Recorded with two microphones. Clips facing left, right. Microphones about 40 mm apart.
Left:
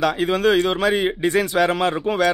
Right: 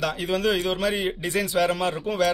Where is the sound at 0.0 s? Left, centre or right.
Left.